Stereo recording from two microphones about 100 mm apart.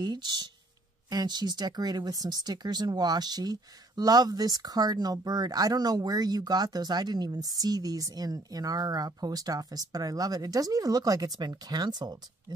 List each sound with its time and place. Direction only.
0.0 s speech: 45° right (ahead or behind)